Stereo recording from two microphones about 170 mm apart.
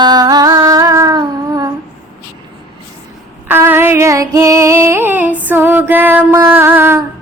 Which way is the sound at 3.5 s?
15° right (ahead or behind).